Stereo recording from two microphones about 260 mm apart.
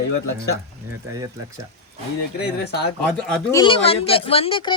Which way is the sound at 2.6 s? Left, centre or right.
Left.